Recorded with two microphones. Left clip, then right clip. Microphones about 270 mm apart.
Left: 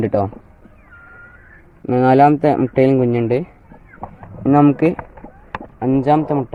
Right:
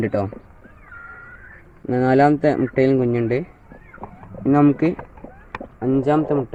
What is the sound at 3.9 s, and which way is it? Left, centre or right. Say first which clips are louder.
Chicken: left 3 dB; left.